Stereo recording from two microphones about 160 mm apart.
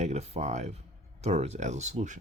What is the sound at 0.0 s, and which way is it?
Speech, 45° right (ahead or behind).